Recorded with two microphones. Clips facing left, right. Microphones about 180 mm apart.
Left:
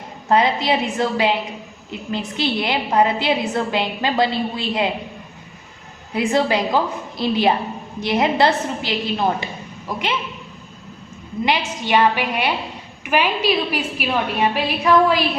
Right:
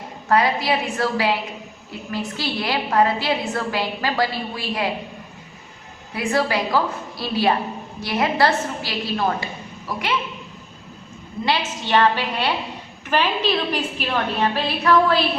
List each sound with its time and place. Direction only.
0.3 s a woman's voice: 20° left (ahead or behind)
6.1 s a woman's voice: 20° left (ahead or behind)
11.4 s a woman's voice: 15° left (ahead or behind)